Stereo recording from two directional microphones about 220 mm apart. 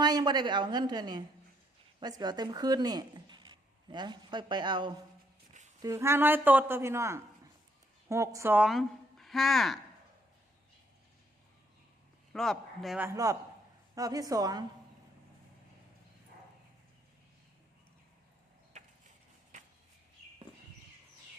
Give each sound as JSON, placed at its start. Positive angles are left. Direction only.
{"t": 0.0, "sound": "a woman's voice", "side_deg": -20}
{"t": 12.3, "sound": "a man's voice", "side_deg": 0}
{"t": 13.1, "sound": "a woman's voice", "side_deg": -15}